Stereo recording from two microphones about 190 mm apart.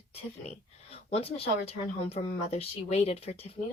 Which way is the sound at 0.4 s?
35° left (ahead or behind).